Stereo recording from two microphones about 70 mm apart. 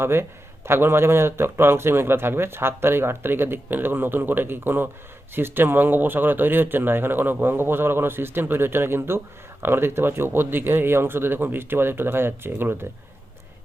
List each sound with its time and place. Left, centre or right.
0.0 s speech: right